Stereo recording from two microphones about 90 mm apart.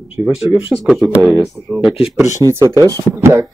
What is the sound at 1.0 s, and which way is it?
Speech, 20° right (ahead or behind).